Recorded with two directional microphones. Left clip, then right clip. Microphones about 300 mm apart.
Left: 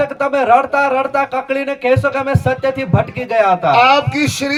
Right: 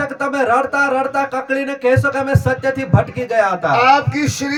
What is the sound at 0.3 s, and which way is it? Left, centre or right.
Speech, centre.